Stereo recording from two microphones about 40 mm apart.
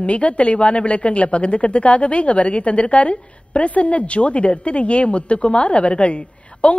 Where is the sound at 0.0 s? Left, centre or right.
Left.